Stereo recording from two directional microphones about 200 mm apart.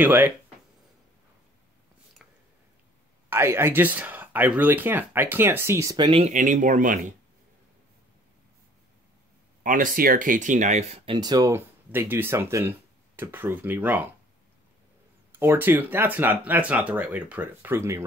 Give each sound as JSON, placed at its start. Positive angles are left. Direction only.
{"t": 0.0, "sound": "speech", "side_deg": -10}
{"t": 3.3, "sound": "speech", "side_deg": -10}
{"t": 6.3, "sound": "speech", "side_deg": -40}
{"t": 9.6, "sound": "speech", "side_deg": -40}
{"t": 11.1, "sound": "speech", "side_deg": -20}
{"t": 15.3, "sound": "speech", "side_deg": -10}